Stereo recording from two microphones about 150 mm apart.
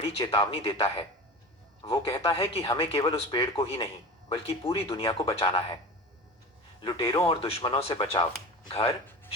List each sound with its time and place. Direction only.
0.0 s speech: 35° left (ahead or behind)
6.8 s speech: 25° left (ahead or behind)
7.3 s speech: 40° left (ahead or behind)